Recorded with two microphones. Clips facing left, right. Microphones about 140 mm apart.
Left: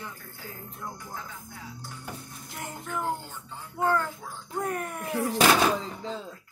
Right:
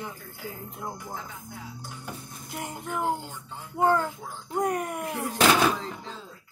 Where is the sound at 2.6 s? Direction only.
15° right (ahead or behind).